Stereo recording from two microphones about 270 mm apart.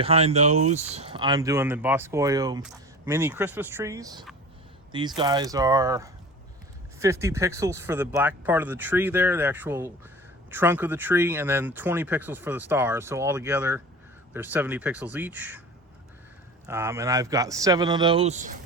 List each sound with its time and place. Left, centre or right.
0.0 s speech: right; by 15.6 s centre
16.6 s speech: centre; by 18.5 s right